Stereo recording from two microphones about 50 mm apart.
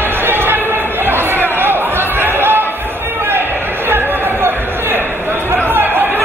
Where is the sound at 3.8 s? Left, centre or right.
Right.